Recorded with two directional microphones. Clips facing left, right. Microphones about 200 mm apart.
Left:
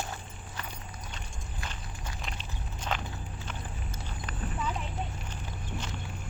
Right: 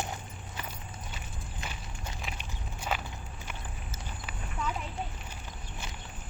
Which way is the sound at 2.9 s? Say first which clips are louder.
Even; 5° right (ahead or behind).